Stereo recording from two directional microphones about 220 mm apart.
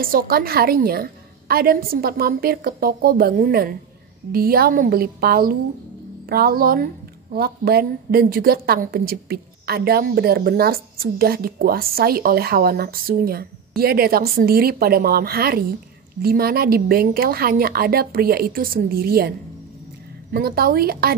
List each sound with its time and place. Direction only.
0.0 s a woman's voice: 40° right (ahead or behind)
20.3 s a woman's voice: 45° right (ahead or behind)